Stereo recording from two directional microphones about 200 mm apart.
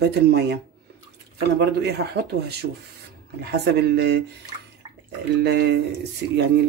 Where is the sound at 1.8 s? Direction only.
55° right (ahead or behind).